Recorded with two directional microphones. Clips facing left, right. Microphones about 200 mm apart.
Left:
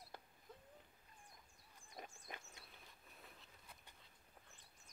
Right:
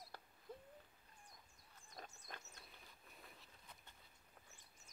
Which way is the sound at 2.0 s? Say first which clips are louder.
Left 2 dB; 10° left (ahead or behind).